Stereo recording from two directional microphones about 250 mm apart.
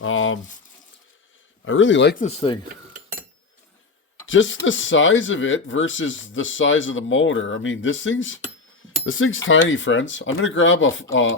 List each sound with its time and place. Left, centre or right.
0.0 s a sound: left
1.6 s speech: left
2.2 s speech: left
2.6 s cutlery: right
4.3 s speech: left